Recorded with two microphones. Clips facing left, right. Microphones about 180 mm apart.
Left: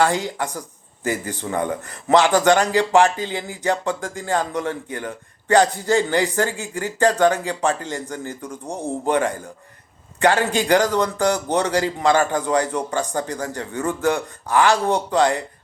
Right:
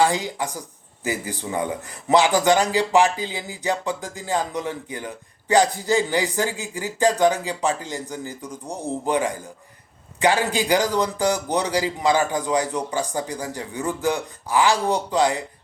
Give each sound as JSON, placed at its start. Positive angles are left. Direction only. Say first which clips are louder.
{"t": 0.0, "sound": "speech", "louder": "left 1 dB", "side_deg": -10}
{"t": 8.4, "sound": "speech", "louder": "left 2 dB", "side_deg": 30}
{"t": 9.0, "sound": "speech", "louder": "left 3 dB", "side_deg": -10}